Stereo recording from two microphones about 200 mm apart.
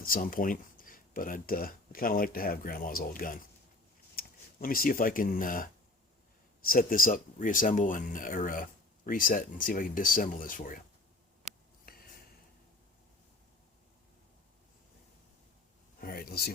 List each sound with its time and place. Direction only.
0.0 s speech: 45° left (ahead or behind)
6.7 s speech: 45° left (ahead or behind)
11.9 s a sound: 50° left (ahead or behind)
16.0 s speech: 50° left (ahead or behind)